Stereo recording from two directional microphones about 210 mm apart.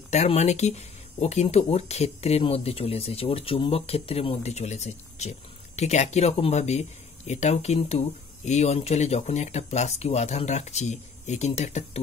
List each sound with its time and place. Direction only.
0.1 s speech: 30° left (ahead or behind)